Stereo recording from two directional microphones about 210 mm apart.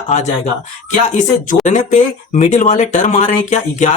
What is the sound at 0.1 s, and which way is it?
Speech, 35° left (ahead or behind).